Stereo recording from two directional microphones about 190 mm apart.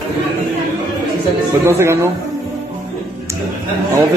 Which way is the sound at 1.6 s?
15° right (ahead or behind).